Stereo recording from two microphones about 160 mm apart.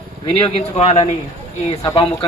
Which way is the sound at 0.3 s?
40° left (ahead or behind).